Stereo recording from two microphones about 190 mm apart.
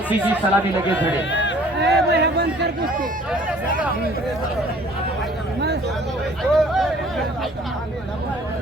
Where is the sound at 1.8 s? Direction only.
60° right (ahead or behind).